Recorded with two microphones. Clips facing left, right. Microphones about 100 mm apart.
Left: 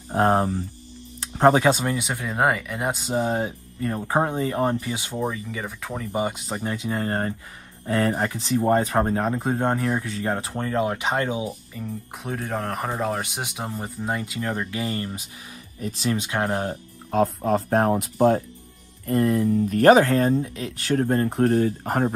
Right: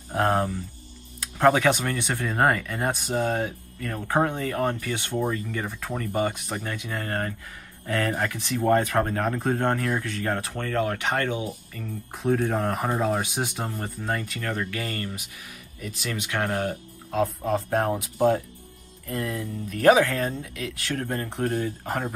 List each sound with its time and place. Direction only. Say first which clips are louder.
0.1 s speech: left 3 dB; 25° left (ahead or behind); by 3.0 s 5° left (ahead or behind)
3.1 s speech: left 3 dB; 20° left (ahead or behind)
5.2 s speech: left 2 dB; centre (ahead or behind)
6.1 s speech: left 1 dB; 15° left (ahead or behind)
12.2 s speech: right 6 dB; centre (ahead or behind); by 15.2 s 20° left (ahead or behind)
15.8 s speech: left 7 dB; 30° left (ahead or behind)
19.0 s speech: left 10 dB; 40° left (ahead or behind)
21.5 s speech: left 6 dB; 60° left (ahead or behind)